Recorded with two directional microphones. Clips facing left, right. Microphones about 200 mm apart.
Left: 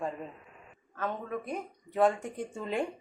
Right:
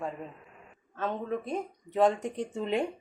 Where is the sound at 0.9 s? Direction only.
25° right (ahead or behind).